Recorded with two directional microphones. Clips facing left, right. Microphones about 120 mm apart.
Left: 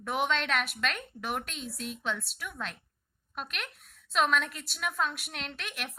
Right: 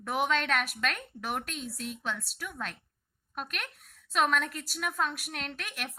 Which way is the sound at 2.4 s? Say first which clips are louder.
Even; 40° right (ahead or behind).